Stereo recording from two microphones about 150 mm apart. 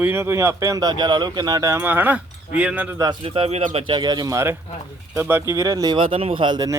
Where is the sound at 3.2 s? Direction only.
40° right (ahead or behind).